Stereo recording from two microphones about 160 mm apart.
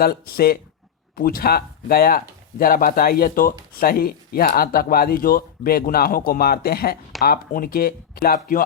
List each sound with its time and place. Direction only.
0.0 s speech: 70° left (ahead or behind)